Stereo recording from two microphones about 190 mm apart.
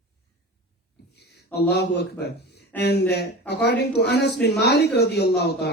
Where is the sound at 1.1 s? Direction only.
60° left (ahead or behind).